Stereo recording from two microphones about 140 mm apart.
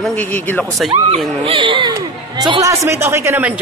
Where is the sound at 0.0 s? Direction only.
10° left (ahead or behind).